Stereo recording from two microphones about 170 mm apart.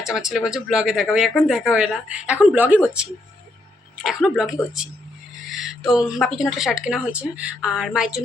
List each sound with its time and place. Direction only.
0.0 s speech: 5° right (ahead or behind)